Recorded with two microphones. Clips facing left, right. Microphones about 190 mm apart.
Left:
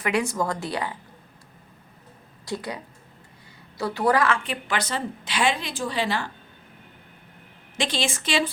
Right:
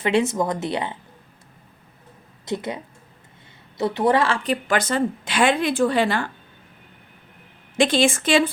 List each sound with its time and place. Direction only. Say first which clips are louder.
0.0 s a woman's voice: right 4 dB; 25° right (ahead or behind)
2.4 s a woman's voice: right 4 dB; 20° right (ahead or behind)
4.4 s speech: right 7 dB; 45° right (ahead or behind)
7.8 s speech: right 9 dB; 50° right (ahead or behind)